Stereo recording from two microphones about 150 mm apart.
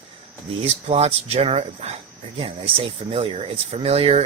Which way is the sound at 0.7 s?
45° right (ahead or behind).